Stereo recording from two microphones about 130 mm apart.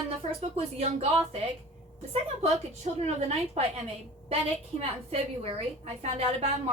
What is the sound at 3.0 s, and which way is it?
Speech, 55° right (ahead or behind).